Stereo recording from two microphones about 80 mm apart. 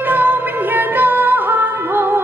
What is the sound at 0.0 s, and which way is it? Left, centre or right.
Music, right.